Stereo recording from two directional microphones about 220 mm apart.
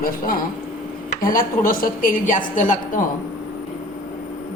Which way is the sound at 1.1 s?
40° left (ahead or behind).